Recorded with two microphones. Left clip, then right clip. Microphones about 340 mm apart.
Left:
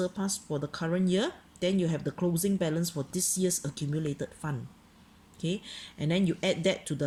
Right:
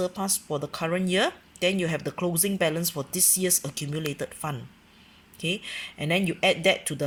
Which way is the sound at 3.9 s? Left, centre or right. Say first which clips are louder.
Right 2 dB; right.